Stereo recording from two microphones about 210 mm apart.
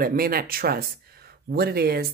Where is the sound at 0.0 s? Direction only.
45° right (ahead or behind).